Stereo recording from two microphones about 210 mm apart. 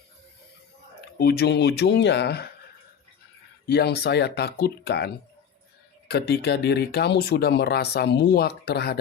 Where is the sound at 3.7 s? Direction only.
50° left (ahead or behind).